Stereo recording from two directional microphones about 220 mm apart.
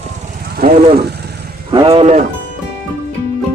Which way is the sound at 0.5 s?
45° right (ahead or behind).